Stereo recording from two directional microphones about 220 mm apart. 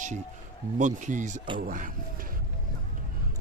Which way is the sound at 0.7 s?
35° right (ahead or behind).